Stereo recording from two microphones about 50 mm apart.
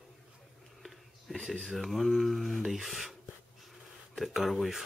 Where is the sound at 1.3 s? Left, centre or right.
Centre.